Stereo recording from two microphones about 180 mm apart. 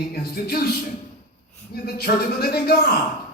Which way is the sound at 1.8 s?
55° left (ahead or behind).